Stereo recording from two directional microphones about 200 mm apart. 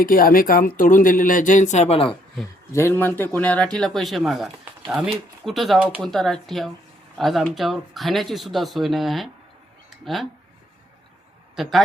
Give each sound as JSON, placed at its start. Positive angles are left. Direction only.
{"t": 0.0, "sound": "speech", "side_deg": 45}
{"t": 2.7, "sound": "speech", "side_deg": 10}
{"t": 11.5, "sound": "a man's voice", "side_deg": 0}